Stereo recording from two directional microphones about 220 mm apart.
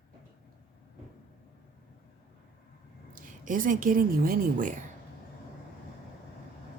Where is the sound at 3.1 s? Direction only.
40° right (ahead or behind).